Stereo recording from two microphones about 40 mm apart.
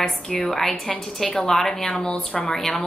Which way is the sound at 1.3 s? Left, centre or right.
Left.